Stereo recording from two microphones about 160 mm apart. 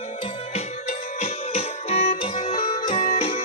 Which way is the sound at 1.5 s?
40° left (ahead or behind).